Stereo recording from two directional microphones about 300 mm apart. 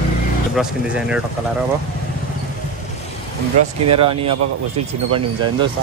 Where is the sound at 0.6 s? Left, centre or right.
Centre.